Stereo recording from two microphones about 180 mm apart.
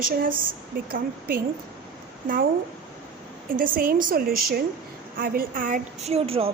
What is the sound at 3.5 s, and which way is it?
A woman's voice, 50° right (ahead or behind).